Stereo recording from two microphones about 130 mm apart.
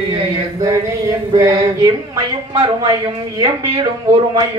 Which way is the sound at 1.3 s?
25° right (ahead or behind).